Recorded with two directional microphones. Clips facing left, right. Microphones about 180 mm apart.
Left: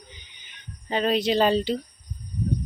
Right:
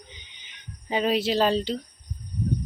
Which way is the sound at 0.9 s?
10° right (ahead or behind).